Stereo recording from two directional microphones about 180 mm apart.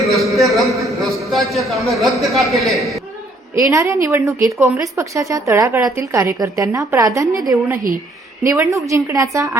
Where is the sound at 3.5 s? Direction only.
15° right (ahead or behind).